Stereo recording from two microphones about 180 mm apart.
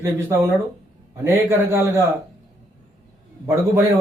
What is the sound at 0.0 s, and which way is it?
Speech, 15° right (ahead or behind).